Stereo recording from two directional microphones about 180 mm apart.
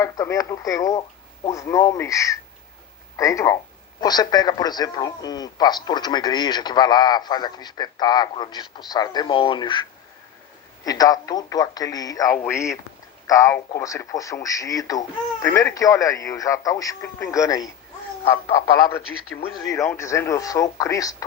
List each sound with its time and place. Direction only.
0.0 s a man's voice: 20° left (ahead or behind)
10.8 s a man's voice: 20° left (ahead or behind)